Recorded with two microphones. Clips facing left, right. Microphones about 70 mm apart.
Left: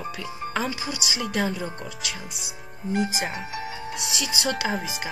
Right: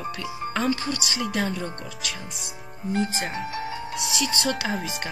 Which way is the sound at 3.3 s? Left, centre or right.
Centre.